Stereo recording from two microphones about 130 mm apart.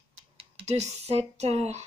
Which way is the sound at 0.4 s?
55° right (ahead or behind).